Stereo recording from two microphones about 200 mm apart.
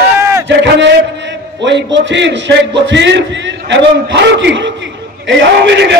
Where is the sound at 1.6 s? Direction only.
65° right (ahead or behind).